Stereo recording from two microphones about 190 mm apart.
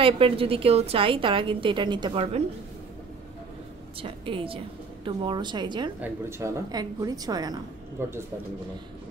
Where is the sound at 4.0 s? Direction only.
30° right (ahead or behind).